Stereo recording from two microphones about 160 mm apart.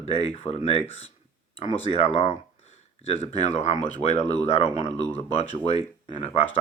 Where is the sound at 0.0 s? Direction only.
40° left (ahead or behind).